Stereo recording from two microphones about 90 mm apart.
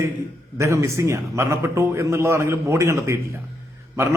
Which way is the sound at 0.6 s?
30° right (ahead or behind).